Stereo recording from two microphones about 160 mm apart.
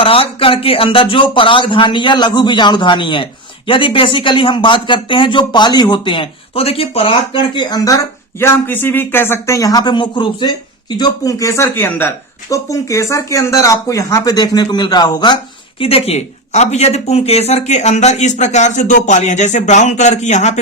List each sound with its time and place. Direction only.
0.0 s speech: 35° left (ahead or behind)